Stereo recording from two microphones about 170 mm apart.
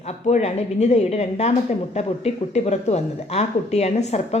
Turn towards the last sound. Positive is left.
turn(degrees=40)  # may be behind; listen again after turning